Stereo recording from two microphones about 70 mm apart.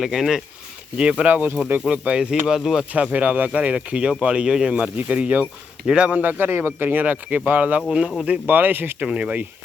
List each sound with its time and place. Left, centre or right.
0.0 s speech: centre
1.3 s a man's voice: right; by 2.8 s centre
2.9 s a man's voice: right
7.8 s speech: centre
8.4 s a man's voice: right
9.0 s speech: centre